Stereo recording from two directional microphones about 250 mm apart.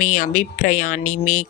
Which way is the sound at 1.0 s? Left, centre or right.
Left.